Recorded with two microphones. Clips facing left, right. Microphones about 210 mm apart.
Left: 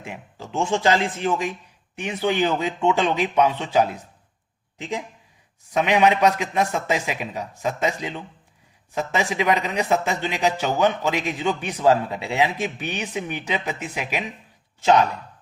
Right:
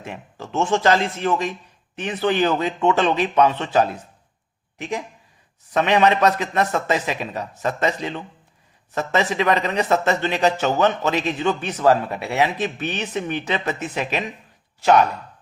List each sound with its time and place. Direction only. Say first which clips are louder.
0.0 s a man's voice: right 2 dB; 10° left (ahead or behind)